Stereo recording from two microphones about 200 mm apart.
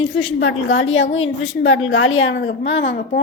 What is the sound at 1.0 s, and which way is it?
Speech, 30° left (ahead or behind).